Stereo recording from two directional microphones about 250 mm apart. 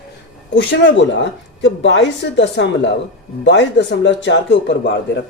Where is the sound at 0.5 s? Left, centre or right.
Left.